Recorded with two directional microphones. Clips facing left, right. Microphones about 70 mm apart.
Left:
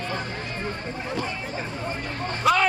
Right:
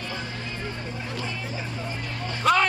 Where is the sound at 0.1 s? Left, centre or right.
Left.